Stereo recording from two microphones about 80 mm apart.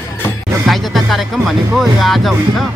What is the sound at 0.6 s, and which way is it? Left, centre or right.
Speech, centre.